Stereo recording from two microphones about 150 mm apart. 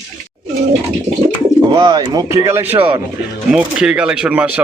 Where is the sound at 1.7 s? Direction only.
30° right (ahead or behind).